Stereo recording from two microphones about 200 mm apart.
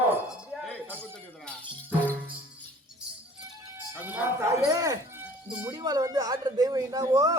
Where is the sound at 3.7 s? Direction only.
10° right (ahead or behind).